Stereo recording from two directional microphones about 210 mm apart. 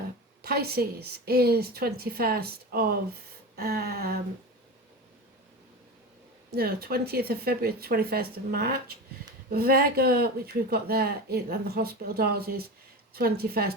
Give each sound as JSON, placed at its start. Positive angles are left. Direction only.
{"t": 0.4, "sound": "speech", "side_deg": -50}
{"t": 6.5, "sound": "speech", "side_deg": -45}